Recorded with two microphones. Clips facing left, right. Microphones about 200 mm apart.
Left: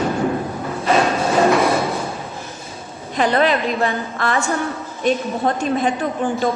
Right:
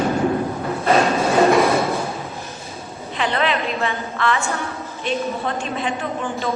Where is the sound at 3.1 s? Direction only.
40° left (ahead or behind).